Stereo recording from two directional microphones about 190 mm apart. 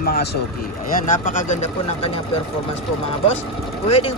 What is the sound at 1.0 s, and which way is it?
Speech, 45° left (ahead or behind).